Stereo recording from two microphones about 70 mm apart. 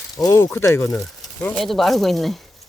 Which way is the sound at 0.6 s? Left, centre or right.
Left.